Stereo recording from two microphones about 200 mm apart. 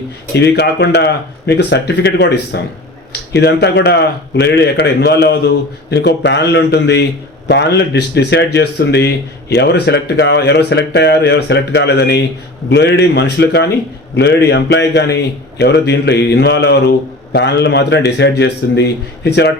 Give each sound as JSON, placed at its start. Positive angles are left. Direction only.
{"t": 0.3, "sound": "speech", "side_deg": 55}